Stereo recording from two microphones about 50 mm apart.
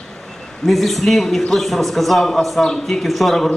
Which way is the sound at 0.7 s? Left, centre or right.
Centre.